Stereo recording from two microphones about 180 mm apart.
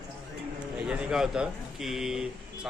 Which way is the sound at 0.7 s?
5° right (ahead or behind).